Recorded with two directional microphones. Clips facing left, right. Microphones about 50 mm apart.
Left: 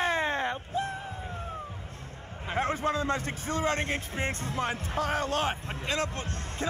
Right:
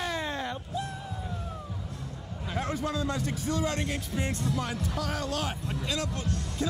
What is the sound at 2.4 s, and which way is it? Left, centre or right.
A man's voice, left.